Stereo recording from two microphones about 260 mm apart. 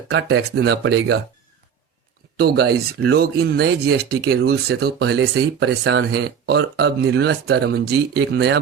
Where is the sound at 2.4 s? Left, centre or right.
Right.